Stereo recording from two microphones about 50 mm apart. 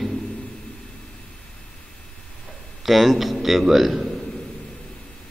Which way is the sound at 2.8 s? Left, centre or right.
Centre.